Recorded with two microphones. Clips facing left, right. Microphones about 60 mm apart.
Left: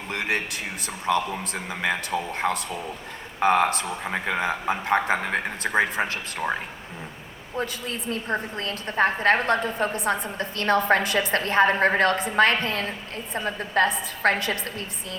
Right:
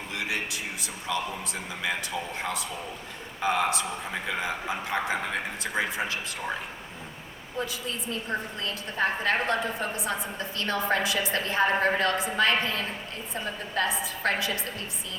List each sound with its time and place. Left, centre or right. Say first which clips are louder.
0.1 s a woman's voice: left 5 dB; left
7.6 s a woman's voice: left 3 dB; left